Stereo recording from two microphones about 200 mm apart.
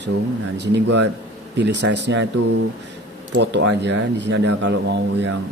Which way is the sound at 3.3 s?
65° right (ahead or behind).